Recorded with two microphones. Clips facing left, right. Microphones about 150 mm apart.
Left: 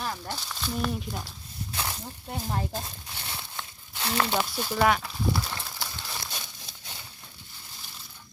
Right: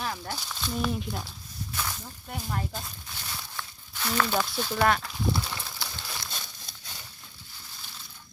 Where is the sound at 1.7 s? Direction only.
25° left (ahead or behind).